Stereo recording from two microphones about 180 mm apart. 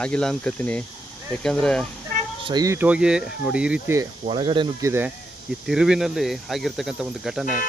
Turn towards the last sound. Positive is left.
turn(degrees=0)  # may be behind; listen again after turning